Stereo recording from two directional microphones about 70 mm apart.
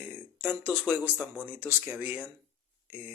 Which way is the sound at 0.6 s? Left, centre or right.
Right.